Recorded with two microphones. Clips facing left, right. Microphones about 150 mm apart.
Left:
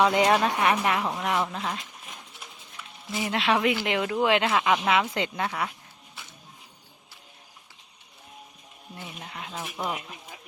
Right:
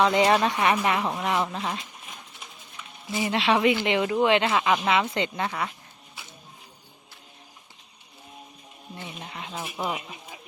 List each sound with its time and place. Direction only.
0.2 s speech: centre (ahead or behind)
3.1 s speech: centre (ahead or behind)
9.0 s speech: centre (ahead or behind)